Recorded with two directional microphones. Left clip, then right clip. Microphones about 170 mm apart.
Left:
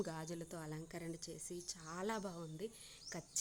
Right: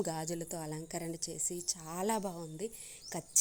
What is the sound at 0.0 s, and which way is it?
A woman's voice, 15° right (ahead or behind).